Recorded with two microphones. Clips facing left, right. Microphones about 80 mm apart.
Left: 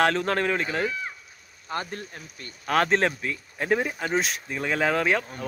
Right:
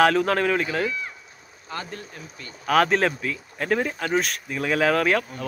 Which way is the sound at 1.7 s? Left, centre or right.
Left.